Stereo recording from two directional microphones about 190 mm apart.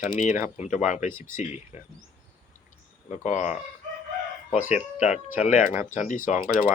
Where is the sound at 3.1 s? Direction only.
40° left (ahead or behind).